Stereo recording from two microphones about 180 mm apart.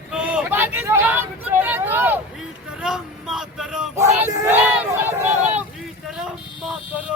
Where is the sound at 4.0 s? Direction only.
15° right (ahead or behind).